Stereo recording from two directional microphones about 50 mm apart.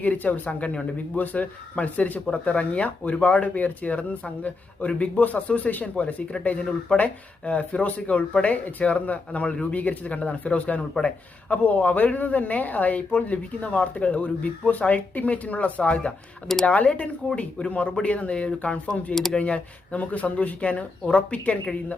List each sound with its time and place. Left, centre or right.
0.0 s speech: left